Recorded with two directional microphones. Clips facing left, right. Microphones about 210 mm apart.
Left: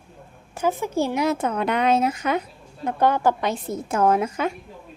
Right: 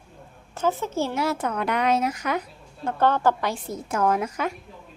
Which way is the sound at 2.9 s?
10° left (ahead or behind).